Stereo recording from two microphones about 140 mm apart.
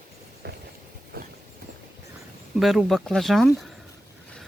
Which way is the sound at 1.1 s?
90° right.